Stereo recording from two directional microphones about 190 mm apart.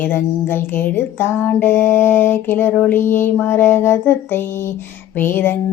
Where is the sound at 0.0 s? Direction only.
10° left (ahead or behind).